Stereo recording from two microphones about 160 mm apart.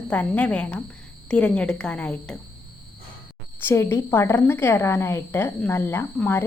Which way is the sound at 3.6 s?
15° left (ahead or behind).